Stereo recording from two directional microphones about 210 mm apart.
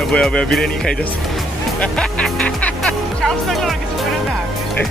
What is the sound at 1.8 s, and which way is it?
Music, 5° left (ahead or behind).